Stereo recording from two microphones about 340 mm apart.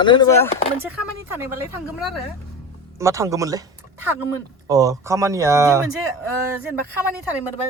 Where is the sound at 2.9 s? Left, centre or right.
Centre.